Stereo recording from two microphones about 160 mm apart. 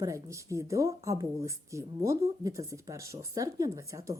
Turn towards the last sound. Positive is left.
turn(degrees=-20)  # may be behind; listen again after turning